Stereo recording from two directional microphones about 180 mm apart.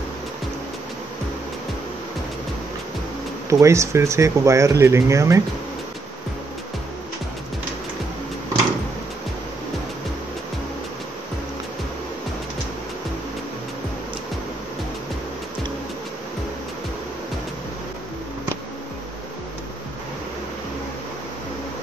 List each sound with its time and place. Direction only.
3.4 s speech: 15° right (ahead or behind)